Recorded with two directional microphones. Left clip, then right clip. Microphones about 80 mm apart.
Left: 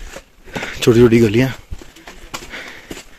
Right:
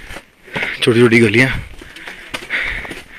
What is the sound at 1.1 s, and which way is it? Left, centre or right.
Speech, left.